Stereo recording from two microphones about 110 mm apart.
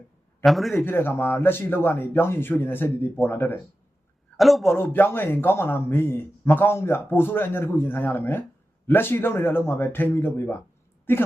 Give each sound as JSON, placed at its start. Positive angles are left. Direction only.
{"t": 0.4, "sound": "a man's voice", "side_deg": 0}
{"t": 0.9, "sound": "a man's voice", "side_deg": 20}
{"t": 4.4, "sound": "a man's voice", "side_deg": 0}
{"t": 4.6, "sound": "a man's voice", "side_deg": 20}